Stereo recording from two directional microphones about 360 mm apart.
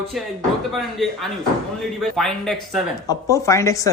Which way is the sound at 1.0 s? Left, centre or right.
Centre.